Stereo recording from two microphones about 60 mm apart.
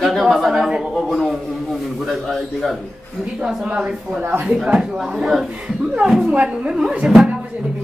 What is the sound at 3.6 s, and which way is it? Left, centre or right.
A woman's voice, centre.